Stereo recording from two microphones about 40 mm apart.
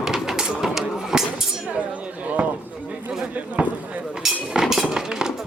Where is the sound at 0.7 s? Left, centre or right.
Centre.